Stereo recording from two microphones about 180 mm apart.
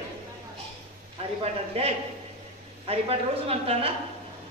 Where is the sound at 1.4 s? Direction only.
35° right (ahead or behind).